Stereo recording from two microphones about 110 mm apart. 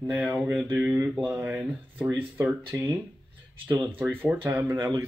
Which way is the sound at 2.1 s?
20° right (ahead or behind).